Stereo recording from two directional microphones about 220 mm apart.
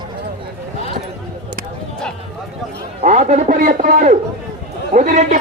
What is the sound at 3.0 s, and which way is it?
Speech, 30° right (ahead or behind).